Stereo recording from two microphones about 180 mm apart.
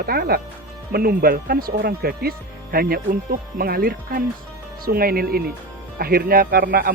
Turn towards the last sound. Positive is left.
turn(degrees=-55)  # may be behind; listen again after turning